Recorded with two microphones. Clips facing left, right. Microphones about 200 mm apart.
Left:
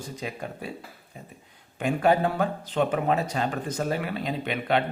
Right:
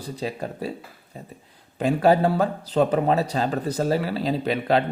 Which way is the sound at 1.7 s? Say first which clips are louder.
Right 4 dB; 35° right (ahead or behind).